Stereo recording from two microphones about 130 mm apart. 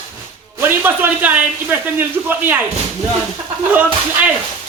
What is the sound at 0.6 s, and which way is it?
A man's voice, 15° right (ahead or behind).